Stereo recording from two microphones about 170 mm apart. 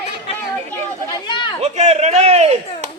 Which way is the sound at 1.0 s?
25° left (ahead or behind).